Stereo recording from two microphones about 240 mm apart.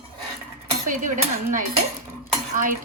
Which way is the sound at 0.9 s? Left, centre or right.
Right.